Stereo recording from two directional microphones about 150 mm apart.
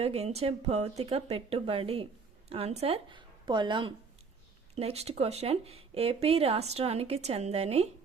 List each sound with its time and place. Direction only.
0.0 s a woman's voice: 45° right (ahead or behind)
4.7 s speech: 45° right (ahead or behind)